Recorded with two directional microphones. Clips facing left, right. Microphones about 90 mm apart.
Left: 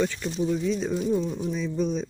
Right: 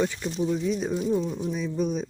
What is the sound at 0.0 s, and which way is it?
Speech, 15° right (ahead or behind).